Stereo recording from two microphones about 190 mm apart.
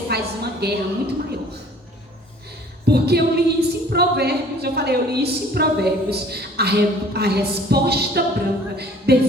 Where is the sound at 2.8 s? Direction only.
55° right (ahead or behind).